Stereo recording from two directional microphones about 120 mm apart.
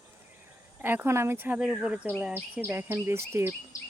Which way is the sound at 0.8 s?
20° right (ahead or behind).